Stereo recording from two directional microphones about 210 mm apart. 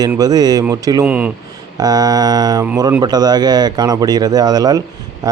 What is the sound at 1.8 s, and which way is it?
Speech, 15° right (ahead or behind).